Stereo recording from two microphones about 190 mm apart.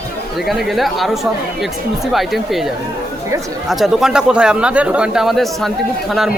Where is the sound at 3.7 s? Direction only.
Centre (ahead or behind).